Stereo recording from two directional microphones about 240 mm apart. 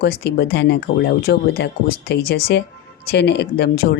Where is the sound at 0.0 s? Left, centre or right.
Left.